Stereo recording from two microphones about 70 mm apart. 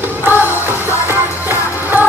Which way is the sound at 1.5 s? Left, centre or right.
Right.